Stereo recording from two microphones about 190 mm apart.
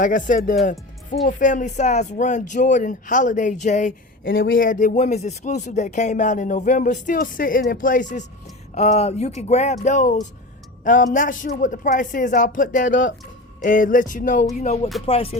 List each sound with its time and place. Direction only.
0.0 s speech: 45° left (ahead or behind)
4.3 s speech: 90° left
4.5 s speech: 45° left (ahead or behind)
15.0 s music: 30° left (ahead or behind)